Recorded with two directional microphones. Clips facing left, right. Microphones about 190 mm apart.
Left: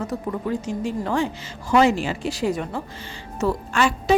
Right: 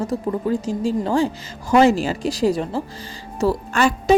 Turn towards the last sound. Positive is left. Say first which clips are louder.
# right 3 dB
turn(degrees=-40)  # may be behind; listen again after turning